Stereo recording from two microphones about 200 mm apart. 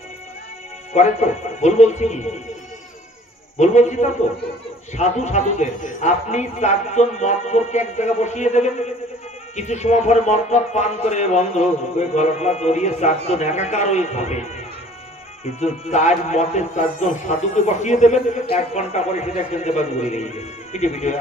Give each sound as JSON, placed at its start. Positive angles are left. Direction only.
{"t": 0.9, "sound": "a man's voice", "side_deg": 35}
{"t": 3.5, "sound": "a man's voice", "side_deg": 35}
{"t": 15.6, "sound": "a man's voice", "side_deg": 35}